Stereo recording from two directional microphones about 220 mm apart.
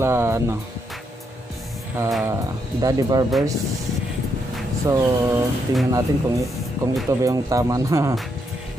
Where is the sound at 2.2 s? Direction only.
15° right (ahead or behind).